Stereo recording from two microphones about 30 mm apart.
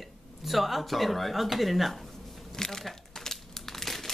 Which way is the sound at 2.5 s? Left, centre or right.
Centre.